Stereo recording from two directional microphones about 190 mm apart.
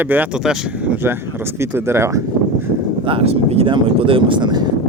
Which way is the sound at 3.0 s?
30° right (ahead or behind).